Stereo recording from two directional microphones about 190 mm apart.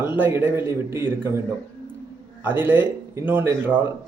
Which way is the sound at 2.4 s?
10° right (ahead or behind).